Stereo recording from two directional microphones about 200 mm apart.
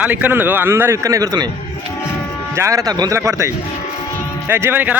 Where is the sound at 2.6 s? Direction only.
15° right (ahead or behind).